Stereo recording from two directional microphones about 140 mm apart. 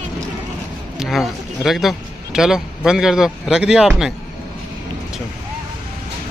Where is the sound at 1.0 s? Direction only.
Centre (ahead or behind).